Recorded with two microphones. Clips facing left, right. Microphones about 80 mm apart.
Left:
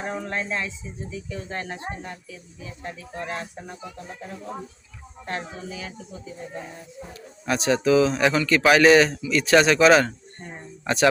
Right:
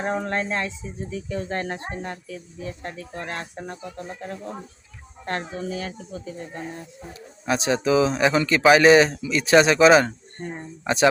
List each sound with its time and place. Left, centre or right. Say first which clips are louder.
0.0 s a sound: right 4 dB; right
1.1 s speech: right 5 dB; right
5.3 s speech: right 4 dB; right
7.1 s speech: right 1 dB; right